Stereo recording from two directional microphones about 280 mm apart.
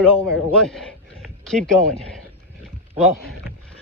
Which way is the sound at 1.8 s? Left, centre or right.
Right.